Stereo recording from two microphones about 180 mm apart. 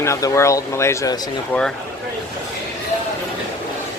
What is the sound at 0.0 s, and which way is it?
Speech, 15° left (ahead or behind).